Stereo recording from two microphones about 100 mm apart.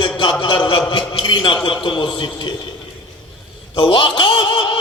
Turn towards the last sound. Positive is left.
turn(degrees=55)  # may be behind; listen again after turning